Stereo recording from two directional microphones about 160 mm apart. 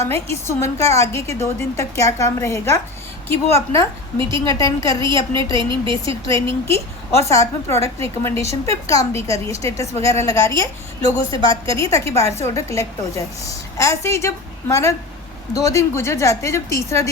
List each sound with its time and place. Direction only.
0.0 s a woman's voice: 15° left (ahead or behind)
5.5 s a woman's voice: 30° right (ahead or behind)
6.2 s a woman's voice: 20° left (ahead or behind)